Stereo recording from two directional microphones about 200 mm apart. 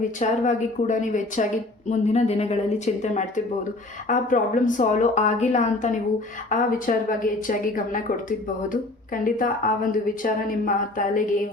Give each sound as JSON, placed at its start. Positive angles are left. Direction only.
{"t": 0.2, "sound": "a woman's voice", "side_deg": 40}